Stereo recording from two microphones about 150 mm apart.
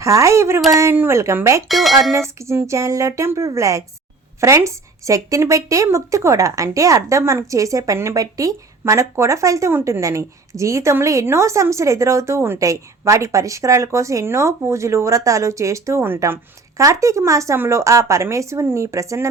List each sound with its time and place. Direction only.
0.0 s speech: 20° right (ahead or behind)
1.6 s speech: centre (ahead or behind)
2.4 s speech: 20° right (ahead or behind)